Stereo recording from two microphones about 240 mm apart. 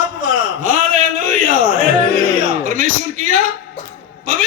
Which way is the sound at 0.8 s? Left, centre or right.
Right.